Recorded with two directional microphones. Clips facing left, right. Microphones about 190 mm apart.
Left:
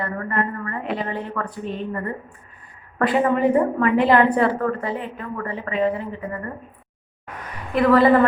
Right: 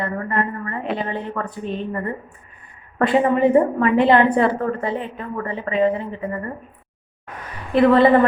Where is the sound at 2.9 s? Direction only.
25° right (ahead or behind).